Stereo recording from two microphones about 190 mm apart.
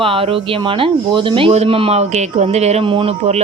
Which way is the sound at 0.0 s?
30° right (ahead or behind).